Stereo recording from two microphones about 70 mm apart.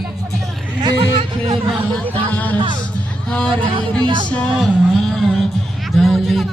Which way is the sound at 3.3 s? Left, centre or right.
Centre.